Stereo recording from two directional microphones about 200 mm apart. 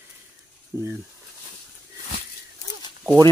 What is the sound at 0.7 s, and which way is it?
Speech, 10° right (ahead or behind).